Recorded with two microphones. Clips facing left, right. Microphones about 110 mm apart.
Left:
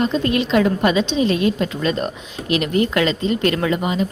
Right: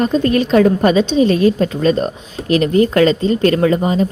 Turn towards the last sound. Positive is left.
turn(degrees=-35)  # may be behind; listen again after turning